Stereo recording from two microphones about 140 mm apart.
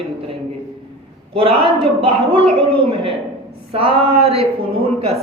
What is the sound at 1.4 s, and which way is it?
A woman's voice, 40° right (ahead or behind).